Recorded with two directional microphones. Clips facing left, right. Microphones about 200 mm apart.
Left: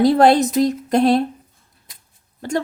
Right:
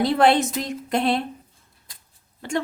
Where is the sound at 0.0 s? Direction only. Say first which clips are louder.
Left 5 dB; 40° left (ahead or behind).